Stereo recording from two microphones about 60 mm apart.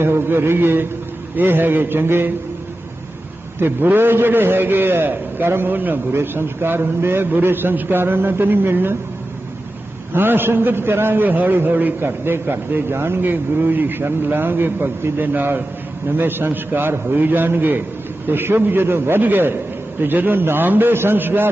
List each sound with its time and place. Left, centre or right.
0.0 s a man's voice: right
3.6 s a man's voice: right
10.1 s a man's voice: right